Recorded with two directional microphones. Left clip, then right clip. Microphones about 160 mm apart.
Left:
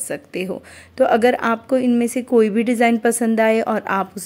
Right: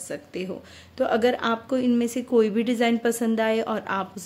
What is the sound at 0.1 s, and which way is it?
Speech, 45° left (ahead or behind).